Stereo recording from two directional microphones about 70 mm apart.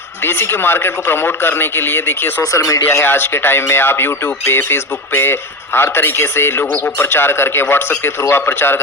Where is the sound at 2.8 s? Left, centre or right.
Left.